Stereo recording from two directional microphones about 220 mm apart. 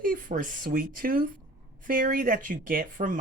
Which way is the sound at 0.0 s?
40° right (ahead or behind).